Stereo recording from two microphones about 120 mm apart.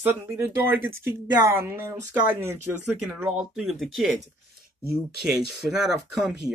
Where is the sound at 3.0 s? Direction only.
5° right (ahead or behind).